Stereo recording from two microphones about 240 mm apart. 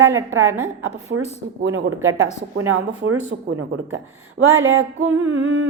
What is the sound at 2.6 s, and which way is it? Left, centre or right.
Speech, right.